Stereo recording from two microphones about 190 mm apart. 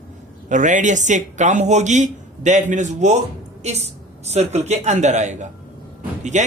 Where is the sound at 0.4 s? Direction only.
40° right (ahead or behind).